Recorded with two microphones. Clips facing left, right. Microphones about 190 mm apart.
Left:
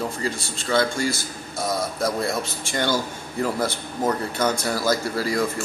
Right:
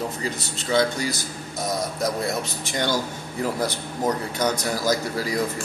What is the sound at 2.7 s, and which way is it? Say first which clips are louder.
Speech: left 1 dB; 20° right (ahead or behind).